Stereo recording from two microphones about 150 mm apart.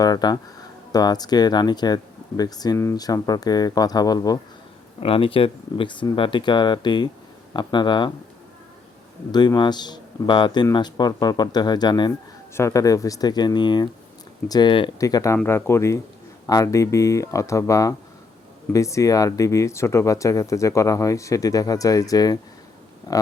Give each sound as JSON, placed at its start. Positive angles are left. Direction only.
{"t": 0.0, "sound": "speech", "side_deg": 25}
{"t": 4.9, "sound": "speech", "side_deg": 40}
{"t": 9.3, "sound": "speech", "side_deg": 30}